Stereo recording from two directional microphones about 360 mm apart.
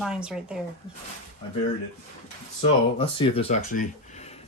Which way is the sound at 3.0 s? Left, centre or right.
Centre.